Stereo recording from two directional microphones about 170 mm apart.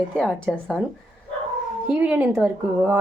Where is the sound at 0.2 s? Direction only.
5° left (ahead or behind).